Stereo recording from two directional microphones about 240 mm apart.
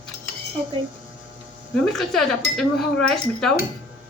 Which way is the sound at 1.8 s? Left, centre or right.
Centre.